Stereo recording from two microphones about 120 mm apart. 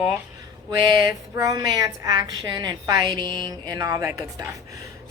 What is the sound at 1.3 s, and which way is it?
A woman's voice, 30° right (ahead or behind).